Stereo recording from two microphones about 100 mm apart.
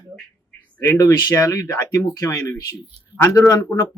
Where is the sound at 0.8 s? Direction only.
30° left (ahead or behind).